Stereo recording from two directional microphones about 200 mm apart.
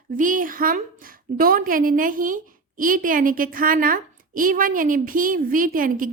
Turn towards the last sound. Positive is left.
turn(degrees=-45)  # may be behind; listen again after turning